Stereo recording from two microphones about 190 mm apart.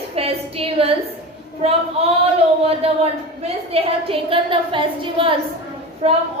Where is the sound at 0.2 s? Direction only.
30° right (ahead or behind).